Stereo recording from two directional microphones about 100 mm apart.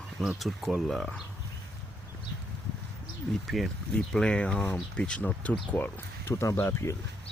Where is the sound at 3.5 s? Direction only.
Centre (ahead or behind); by 6.3 s 20° left (ahead or behind).